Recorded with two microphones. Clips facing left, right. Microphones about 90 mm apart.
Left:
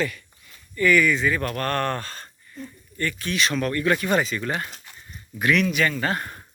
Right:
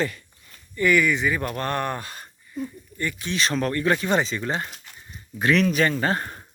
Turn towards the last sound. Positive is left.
turn(degrees=-30)  # may be behind; listen again after turning